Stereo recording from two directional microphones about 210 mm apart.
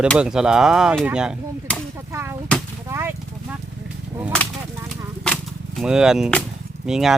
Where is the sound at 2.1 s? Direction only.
10° right (ahead or behind).